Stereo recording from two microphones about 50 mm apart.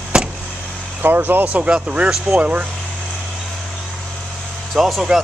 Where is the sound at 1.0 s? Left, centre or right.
Right.